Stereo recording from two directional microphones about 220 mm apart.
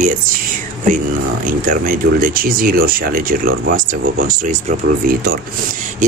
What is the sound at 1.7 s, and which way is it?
Speech, 40° right (ahead or behind).